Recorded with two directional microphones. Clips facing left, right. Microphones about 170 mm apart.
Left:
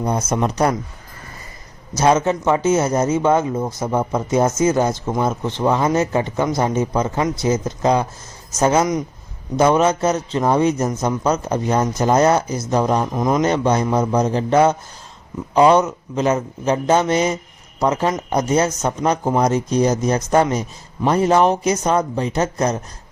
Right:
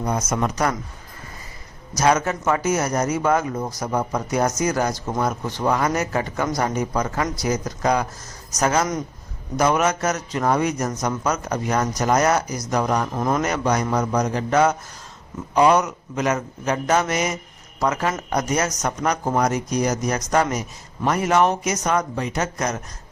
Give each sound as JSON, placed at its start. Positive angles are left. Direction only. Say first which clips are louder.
{"t": 0.0, "sound": "speech", "louder": "left 3 dB", "side_deg": 30}
{"t": 2.0, "sound": "speech", "louder": "left 4 dB", "side_deg": 25}
{"t": 13.1, "sound": "a man's voice", "louder": "left 4 dB", "side_deg": 15}
{"t": 13.4, "sound": "speech", "louder": "left 5 dB", "side_deg": 30}